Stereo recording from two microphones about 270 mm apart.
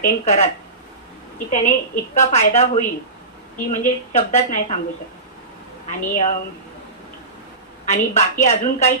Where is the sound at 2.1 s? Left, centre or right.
Left.